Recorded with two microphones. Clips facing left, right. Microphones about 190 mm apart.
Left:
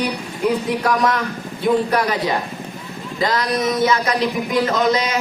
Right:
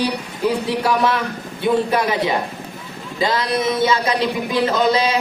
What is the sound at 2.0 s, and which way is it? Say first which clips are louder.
Speech: right 1 dB; 20° right (ahead or behind).